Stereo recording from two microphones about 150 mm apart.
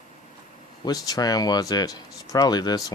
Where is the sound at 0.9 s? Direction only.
25° left (ahead or behind).